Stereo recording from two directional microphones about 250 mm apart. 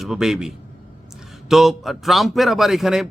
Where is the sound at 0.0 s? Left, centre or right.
Centre.